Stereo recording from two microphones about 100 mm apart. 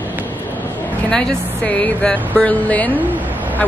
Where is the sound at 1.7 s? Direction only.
10° left (ahead or behind).